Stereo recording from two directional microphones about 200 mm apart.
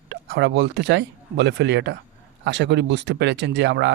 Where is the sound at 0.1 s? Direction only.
55° right (ahead or behind).